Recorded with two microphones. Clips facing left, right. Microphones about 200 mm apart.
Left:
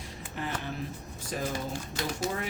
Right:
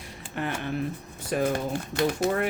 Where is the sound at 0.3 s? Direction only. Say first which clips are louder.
Right 5 dB; 60° right (ahead or behind).